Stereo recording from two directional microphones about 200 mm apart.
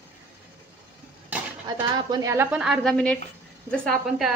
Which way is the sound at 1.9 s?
20° right (ahead or behind).